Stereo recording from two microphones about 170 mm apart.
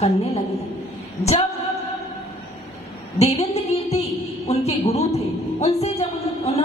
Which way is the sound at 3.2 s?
40° left (ahead or behind).